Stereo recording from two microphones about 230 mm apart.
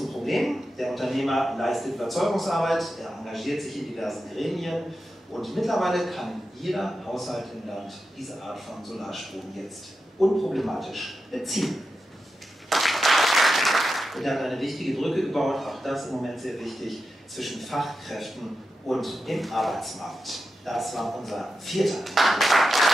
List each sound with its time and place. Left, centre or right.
0.0 s a man's voice: centre